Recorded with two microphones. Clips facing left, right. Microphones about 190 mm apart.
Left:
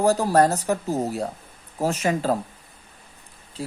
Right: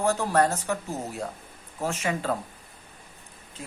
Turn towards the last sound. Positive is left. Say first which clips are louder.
# left 9 dB
turn(degrees=35)  # may be behind; listen again after turning